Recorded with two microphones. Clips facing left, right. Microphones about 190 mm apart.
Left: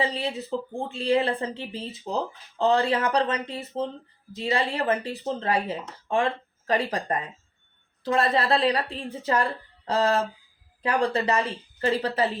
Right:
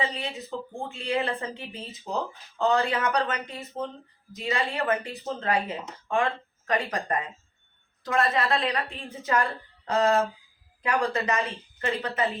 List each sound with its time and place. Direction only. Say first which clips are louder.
0.0 s speech: left 4 dB; 35° left (ahead or behind)
8.0 s speech: left 2 dB; 35° left (ahead or behind)
9.8 s a sound: even; 30° left (ahead or behind)
11.0 s speech: left 3 dB; 35° left (ahead or behind)